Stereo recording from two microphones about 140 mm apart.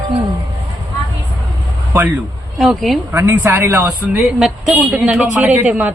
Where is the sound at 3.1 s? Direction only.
15° right (ahead or behind).